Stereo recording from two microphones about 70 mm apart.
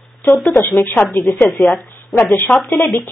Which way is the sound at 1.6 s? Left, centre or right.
Centre.